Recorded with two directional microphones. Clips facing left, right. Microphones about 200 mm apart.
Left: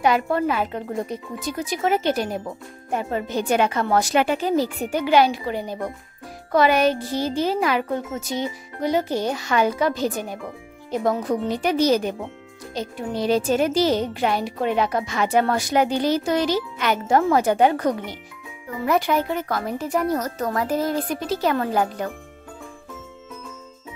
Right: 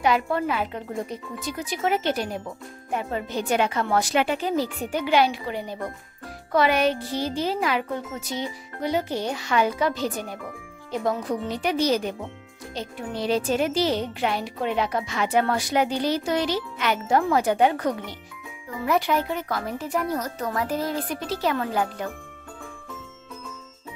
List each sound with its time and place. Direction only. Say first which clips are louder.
0.0 s speech: left 3 dB; 45° left (ahead or behind)
18.9 s speech: left 2 dB; 50° left (ahead or behind)